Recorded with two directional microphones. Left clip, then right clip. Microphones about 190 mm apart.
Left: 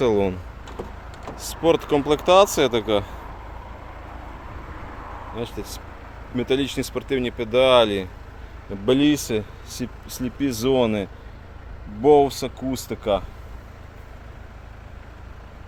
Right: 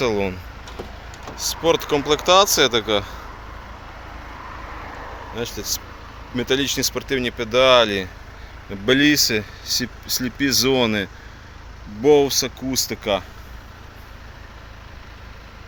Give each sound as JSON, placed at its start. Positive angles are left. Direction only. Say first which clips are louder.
{"t": 0.0, "sound": "speech", "louder": "left 1 dB", "side_deg": 25}
{"t": 1.6, "sound": "speech", "louder": "even", "side_deg": 20}
{"t": 5.3, "sound": "speech", "louder": "right 5 dB", "side_deg": 0}
{"t": 12.5, "sound": "speech", "louder": "right 5 dB", "side_deg": 25}
{"t": 12.9, "sound": "speech", "louder": "left 2 dB", "side_deg": 0}